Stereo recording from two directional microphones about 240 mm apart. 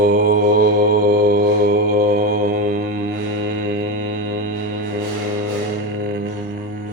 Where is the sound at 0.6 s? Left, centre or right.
Right.